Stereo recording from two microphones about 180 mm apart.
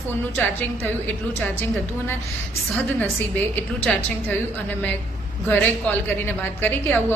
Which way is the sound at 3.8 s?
10° left (ahead or behind).